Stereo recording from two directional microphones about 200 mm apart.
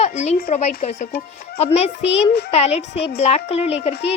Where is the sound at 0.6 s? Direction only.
35° left (ahead or behind).